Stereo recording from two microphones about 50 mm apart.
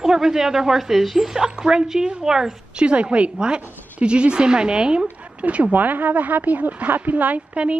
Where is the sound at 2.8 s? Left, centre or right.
Right.